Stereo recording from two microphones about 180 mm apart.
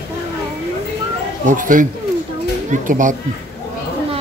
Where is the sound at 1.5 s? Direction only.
50° right (ahead or behind).